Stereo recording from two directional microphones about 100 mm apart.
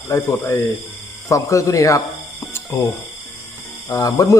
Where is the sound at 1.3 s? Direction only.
30° left (ahead or behind).